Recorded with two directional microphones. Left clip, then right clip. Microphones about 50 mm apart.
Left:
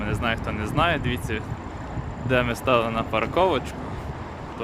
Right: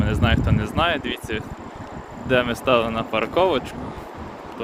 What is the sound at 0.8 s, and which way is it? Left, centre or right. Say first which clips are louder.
Speech: right 1 dB; centre.